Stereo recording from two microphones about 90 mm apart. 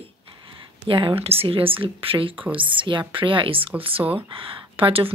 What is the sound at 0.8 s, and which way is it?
Speech, 70° right (ahead or behind).